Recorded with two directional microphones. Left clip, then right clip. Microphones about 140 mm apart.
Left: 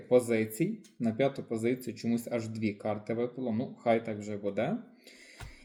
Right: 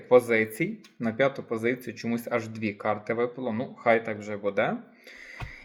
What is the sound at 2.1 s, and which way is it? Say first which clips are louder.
Speech: right 6 dB; 35° right (ahead or behind).